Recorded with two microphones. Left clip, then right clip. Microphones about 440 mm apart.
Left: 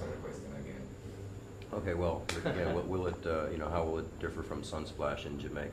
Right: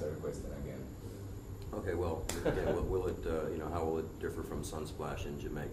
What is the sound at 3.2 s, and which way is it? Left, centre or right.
Speech, left.